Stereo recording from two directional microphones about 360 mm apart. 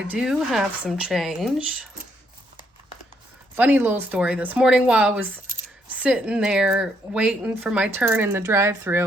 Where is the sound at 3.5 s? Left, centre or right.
Centre.